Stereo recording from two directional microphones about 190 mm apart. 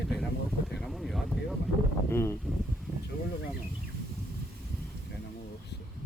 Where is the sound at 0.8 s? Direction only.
Centre (ahead or behind).